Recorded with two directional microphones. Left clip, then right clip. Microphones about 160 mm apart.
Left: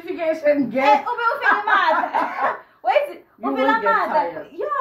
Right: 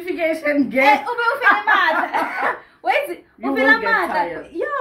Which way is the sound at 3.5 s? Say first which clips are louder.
Right 4 dB; 25° right (ahead or behind).